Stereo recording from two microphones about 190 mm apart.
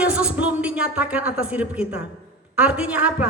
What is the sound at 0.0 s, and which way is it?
A woman's voice, 5° right (ahead or behind).